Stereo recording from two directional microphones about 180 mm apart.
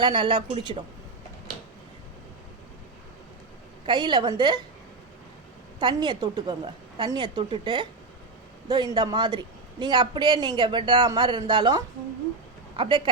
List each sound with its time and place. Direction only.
0.0 s a woman's voice: 25° right (ahead or behind)
3.8 s a woman's voice: 25° right (ahead or behind)
5.8 s a woman's voice: 25° right (ahead or behind)